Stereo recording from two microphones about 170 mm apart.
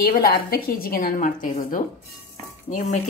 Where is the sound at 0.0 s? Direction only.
65° left (ahead or behind).